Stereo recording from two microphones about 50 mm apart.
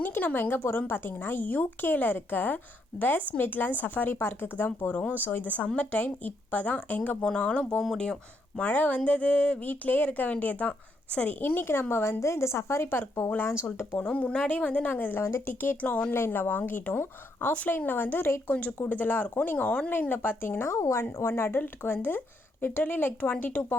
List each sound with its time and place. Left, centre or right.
0.0 s a sound: left
0.5 s speech: left; by 8.6 s centre
8.6 s speech: left
11.3 s speech: left
12.2 s speech: left
13.3 s speech: left
14.1 s speech: left
15.2 s speech: left
15.8 s speech: left
16.1 s speech: left
17.5 s speech: left
20.6 s speech: left
21.6 s speech: left